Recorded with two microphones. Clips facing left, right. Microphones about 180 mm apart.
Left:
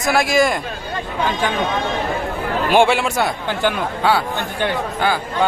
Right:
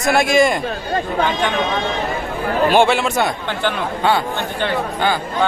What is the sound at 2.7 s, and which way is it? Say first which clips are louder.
A man's voice: left 2 dB; 10° left (ahead or behind).